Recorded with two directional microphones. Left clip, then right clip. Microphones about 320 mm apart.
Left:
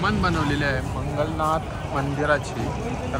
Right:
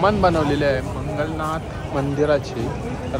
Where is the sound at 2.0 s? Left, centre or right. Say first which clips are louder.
Right 3 dB; centre.